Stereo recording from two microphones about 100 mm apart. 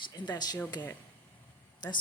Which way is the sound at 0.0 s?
50° left (ahead or behind).